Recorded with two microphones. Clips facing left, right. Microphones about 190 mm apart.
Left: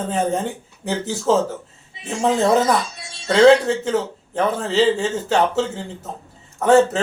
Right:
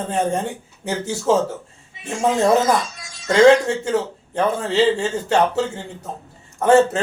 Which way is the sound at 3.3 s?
Centre (ahead or behind).